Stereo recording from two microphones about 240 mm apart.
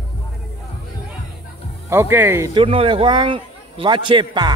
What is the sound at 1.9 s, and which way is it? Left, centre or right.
Speech, centre.